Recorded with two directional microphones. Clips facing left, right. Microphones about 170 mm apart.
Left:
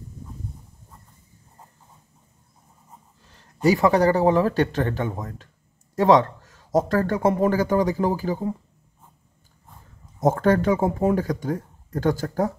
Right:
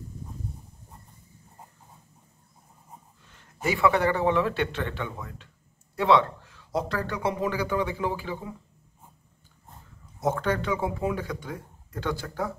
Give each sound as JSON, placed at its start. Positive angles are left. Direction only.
{"t": 3.6, "sound": "speech", "side_deg": 40}
{"t": 10.2, "sound": "speech", "side_deg": 45}